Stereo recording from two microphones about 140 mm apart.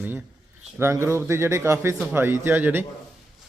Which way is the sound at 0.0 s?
15° right (ahead or behind).